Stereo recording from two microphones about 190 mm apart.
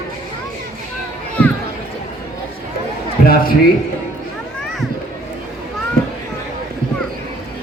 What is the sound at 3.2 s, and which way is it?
Speech, 50° left (ahead or behind).